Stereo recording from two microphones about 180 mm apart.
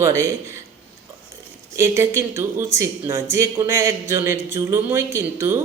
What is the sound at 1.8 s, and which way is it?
Speech, 15° right (ahead or behind).